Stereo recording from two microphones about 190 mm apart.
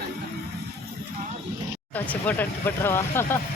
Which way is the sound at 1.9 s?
10° left (ahead or behind).